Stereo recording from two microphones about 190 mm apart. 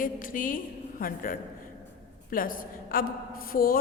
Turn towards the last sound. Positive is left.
turn(degrees=50)  # may be behind; listen again after turning